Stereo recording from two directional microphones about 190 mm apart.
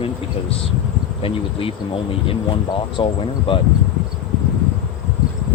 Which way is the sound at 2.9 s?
25° left (ahead or behind).